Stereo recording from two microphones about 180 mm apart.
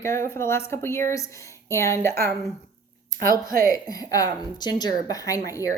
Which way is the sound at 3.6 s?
20° left (ahead or behind).